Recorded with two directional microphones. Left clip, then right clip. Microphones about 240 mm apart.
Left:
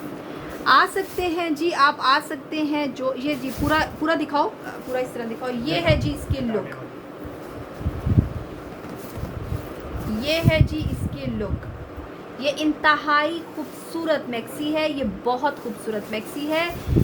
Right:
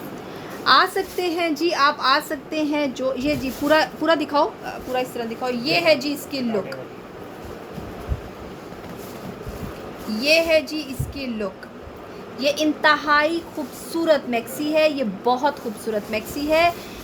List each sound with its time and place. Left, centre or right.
0.6 s a woman's voice: centre
10.2 s a woman's voice: right
12.4 s a woman's voice: centre